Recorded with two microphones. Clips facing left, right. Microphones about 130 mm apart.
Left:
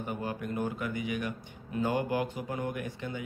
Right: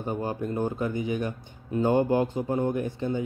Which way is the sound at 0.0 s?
30° right (ahead or behind).